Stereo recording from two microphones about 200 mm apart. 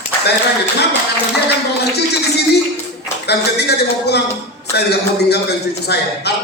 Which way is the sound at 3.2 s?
55° left (ahead or behind).